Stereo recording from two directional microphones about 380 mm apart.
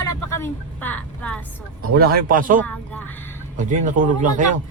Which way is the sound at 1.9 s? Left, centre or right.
Right.